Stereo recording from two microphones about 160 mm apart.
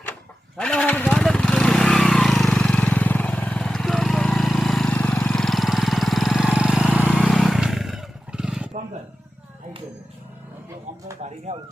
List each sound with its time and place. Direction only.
0.5 s vehicle: 5° left (ahead or behind)
7.1 s vehicle: 5° left (ahead or behind)
11.5 s a sound: 45° right (ahead or behind)